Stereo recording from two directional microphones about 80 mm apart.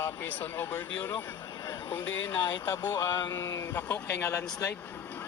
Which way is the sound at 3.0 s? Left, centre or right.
Left.